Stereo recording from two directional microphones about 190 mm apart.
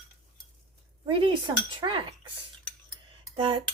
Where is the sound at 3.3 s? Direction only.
25° right (ahead or behind).